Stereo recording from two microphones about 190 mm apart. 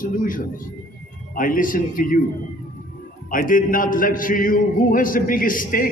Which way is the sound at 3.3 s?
45° left (ahead or behind).